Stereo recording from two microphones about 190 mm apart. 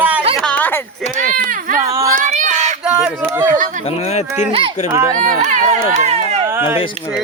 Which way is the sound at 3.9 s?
35° left (ahead or behind).